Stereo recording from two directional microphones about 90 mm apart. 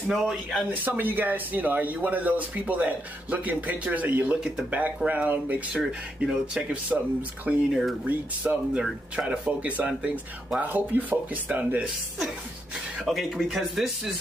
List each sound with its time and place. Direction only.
0.1 s speech: centre (ahead or behind)
0.8 s speech: 20° right (ahead or behind)
5.8 s speech: 5° right (ahead or behind)
12.9 s speech: centre (ahead or behind)